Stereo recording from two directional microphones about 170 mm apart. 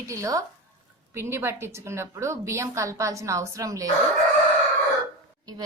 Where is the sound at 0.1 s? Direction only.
20° right (ahead or behind).